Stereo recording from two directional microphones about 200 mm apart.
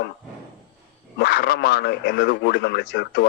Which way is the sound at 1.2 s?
55° left (ahead or behind).